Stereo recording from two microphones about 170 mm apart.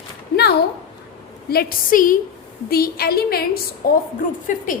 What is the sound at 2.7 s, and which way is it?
A woman's voice, 65° left (ahead or behind).